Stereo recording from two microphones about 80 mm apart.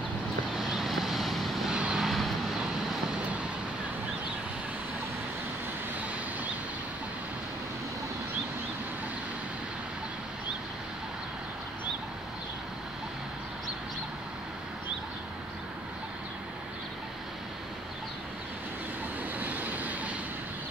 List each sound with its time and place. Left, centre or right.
0.6 s vehicle: centre
1.8 s vehicle: centre
2.0 s vehicle: centre
19.4 s vehicle: right